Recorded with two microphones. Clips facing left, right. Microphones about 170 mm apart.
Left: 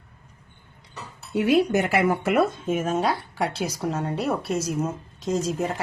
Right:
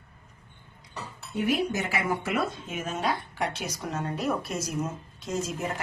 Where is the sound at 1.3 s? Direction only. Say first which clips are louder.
Left 7 dB; 70° left (ahead or behind); by 5.3 s 30° left (ahead or behind).